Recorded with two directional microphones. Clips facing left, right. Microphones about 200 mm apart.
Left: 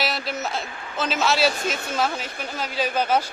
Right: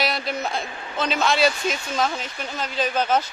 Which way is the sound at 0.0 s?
Centre (ahead or behind).